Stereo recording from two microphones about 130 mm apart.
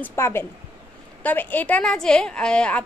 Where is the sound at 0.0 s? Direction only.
20° left (ahead or behind).